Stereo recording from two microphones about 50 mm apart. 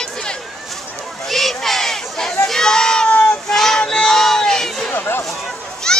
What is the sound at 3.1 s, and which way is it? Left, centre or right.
Child singing, left.